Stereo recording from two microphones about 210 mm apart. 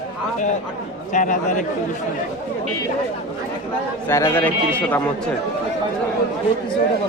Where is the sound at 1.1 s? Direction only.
35° left (ahead or behind).